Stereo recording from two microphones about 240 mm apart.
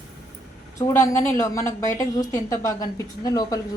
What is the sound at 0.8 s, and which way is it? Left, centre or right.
A woman's voice, centre.